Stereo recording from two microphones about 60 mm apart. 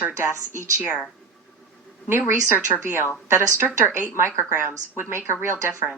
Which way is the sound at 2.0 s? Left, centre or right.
Right.